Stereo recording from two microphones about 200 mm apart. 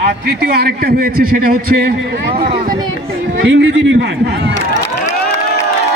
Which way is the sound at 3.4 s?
70° right (ahead or behind).